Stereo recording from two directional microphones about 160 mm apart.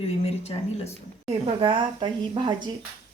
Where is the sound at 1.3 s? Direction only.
35° right (ahead or behind).